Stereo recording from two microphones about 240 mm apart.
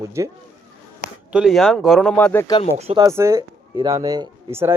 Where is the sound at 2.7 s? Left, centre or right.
Right.